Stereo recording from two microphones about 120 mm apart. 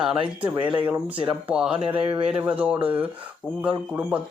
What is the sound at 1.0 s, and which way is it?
Speech, 50° right (ahead or behind).